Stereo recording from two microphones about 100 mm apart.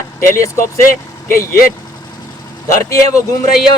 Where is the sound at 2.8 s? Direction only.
30° left (ahead or behind).